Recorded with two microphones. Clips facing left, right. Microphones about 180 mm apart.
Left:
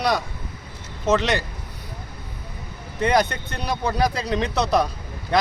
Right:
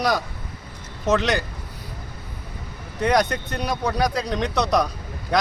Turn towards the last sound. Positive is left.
turn(degrees=0)  # may be behind; listen again after turning